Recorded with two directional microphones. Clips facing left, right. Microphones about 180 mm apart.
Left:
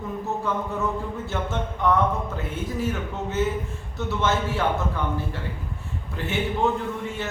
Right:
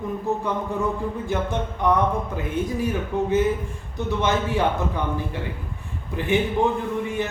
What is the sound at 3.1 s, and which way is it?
Speech, 15° right (ahead or behind).